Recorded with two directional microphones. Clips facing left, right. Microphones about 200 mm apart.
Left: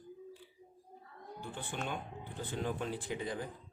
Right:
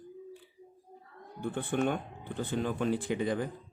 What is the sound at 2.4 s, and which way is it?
Speech, 75° right (ahead or behind).